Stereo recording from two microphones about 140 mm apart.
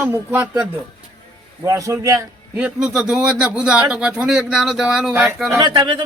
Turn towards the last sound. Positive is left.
turn(degrees=-35)  # may be behind; listen again after turning